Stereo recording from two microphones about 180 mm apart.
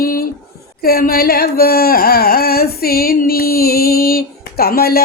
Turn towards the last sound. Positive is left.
turn(degrees=60)  # may be behind; listen again after turning